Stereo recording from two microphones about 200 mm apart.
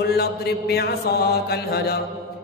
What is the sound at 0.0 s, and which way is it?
A man's voice, 55° left (ahead or behind).